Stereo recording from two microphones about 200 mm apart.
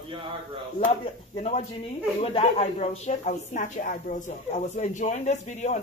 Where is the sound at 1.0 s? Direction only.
30° left (ahead or behind).